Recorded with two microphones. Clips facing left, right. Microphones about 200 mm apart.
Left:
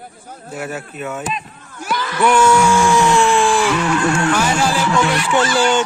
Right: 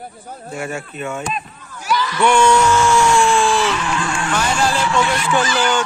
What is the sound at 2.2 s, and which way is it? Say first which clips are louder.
Music: left 1 dB; 5° left (ahead or behind).